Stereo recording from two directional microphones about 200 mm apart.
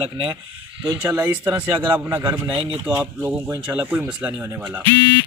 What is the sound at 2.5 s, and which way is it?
Speech, 25° right (ahead or behind).